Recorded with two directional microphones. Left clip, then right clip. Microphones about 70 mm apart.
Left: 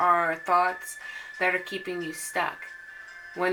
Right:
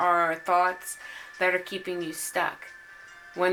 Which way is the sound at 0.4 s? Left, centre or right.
Right.